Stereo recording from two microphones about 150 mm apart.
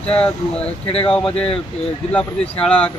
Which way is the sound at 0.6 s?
40° left (ahead or behind).